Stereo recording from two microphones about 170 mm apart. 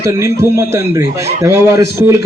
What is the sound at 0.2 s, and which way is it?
A man's voice, 15° right (ahead or behind).